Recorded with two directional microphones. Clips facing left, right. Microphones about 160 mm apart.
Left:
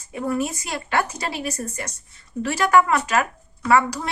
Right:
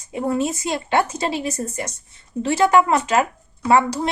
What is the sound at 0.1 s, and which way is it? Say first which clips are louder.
A woman's voice: right 3 dB; 25° right (ahead or behind).